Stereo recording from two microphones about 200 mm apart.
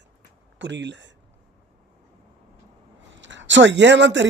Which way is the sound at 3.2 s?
65° right (ahead or behind).